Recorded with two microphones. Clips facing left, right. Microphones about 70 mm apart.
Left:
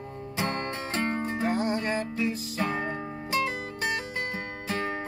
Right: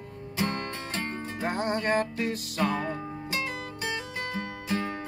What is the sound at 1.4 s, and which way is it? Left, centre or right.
Music, right.